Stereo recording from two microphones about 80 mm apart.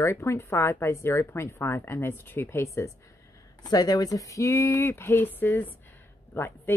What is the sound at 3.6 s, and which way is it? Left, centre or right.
A woman's voice, left.